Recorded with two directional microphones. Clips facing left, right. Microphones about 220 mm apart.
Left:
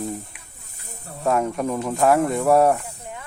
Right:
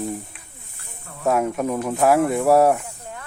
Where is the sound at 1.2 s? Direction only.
5° right (ahead or behind).